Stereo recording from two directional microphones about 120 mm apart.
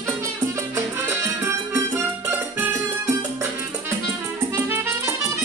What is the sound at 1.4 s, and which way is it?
Music, 20° right (ahead or behind).